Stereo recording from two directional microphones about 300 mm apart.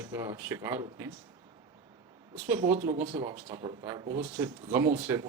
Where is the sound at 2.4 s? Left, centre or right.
Centre.